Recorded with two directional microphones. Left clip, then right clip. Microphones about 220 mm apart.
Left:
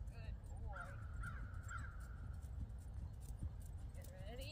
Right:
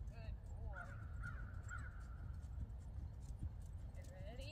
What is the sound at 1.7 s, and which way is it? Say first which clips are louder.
Crow: left 2 dB; 55° left (ahead or behind).